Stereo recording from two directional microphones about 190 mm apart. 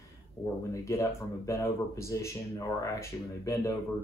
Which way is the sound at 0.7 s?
15° left (ahead or behind).